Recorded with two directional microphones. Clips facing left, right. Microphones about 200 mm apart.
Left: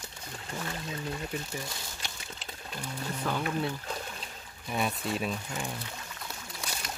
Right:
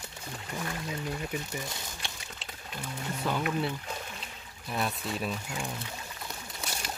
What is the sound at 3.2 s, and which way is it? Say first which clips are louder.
Speech: right 1 dB; 5° right (ahead or behind).